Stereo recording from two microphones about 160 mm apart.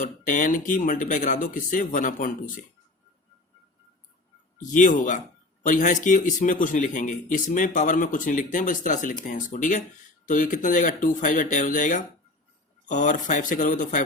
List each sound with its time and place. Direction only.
0.3 s speech: 55° left (ahead or behind)
4.6 s speech: 55° left (ahead or behind)